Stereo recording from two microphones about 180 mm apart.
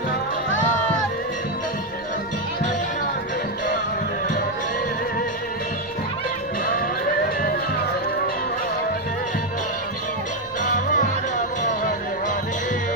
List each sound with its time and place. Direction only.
10.6 s music: 45° left (ahead or behind)